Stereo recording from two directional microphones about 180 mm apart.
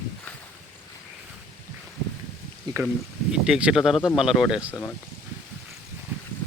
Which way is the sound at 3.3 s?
5° right (ahead or behind).